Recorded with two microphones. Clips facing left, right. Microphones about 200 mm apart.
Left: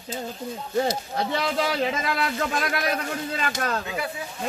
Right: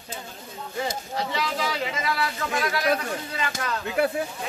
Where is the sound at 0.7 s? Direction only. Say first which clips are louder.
Left 5 dB; 50° left (ahead or behind).